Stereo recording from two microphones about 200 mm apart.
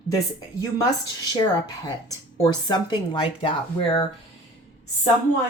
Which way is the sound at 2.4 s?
20° left (ahead or behind).